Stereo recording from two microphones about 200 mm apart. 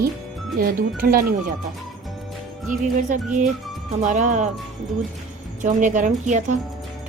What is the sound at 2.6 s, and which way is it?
Speech, 40° right (ahead or behind).